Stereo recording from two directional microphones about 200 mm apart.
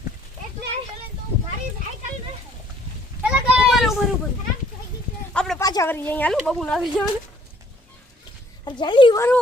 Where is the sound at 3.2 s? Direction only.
Centre (ahead or behind).